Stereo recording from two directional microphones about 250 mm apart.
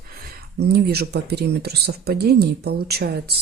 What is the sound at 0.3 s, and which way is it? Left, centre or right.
Speech, right.